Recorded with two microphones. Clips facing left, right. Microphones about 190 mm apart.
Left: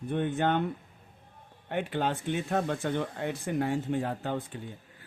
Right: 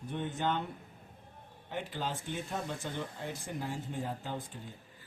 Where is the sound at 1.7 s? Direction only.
65° left (ahead or behind).